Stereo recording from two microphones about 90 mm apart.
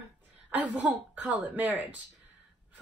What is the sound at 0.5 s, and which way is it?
A woman's voice, 20° right (ahead or behind).